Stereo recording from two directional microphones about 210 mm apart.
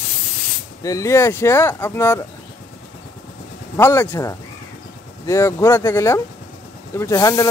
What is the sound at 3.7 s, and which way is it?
Speech, 10° left (ahead or behind).